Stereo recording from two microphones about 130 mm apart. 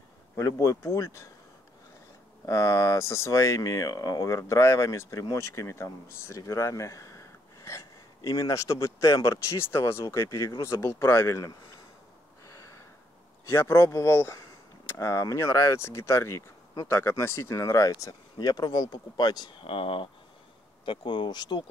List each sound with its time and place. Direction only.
0.4 s speech: 20° left (ahead or behind)
2.4 s speech: 25° left (ahead or behind)
12.4 s a sound: 25° left (ahead or behind)
13.5 s speech: 20° left (ahead or behind); by 21.6 s 35° left (ahead or behind)